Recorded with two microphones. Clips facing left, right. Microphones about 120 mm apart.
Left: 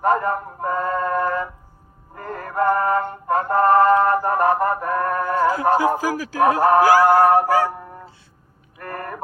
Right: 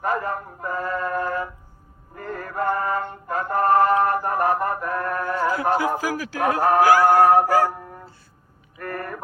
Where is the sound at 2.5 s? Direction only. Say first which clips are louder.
Left 5 dB; 40° left (ahead or behind).